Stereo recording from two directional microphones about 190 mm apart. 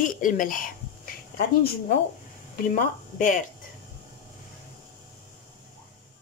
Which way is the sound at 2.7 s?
45° left (ahead or behind).